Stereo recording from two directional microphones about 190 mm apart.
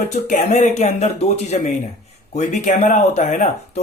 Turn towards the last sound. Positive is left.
turn(degrees=35)  # may be behind; listen again after turning